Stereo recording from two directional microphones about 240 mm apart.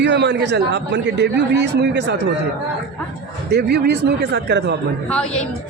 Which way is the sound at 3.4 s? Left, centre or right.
Right.